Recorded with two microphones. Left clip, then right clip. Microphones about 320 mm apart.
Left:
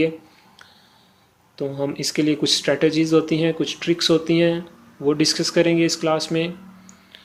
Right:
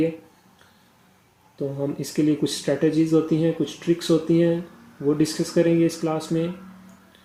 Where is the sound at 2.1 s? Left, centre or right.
Left.